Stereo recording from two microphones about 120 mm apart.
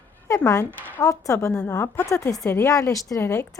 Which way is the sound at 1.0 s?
25° left (ahead or behind).